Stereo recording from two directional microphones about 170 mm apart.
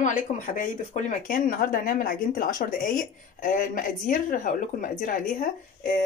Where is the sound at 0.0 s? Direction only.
50° left (ahead or behind).